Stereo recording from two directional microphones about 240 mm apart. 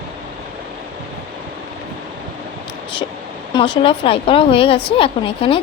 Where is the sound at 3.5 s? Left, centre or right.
Left.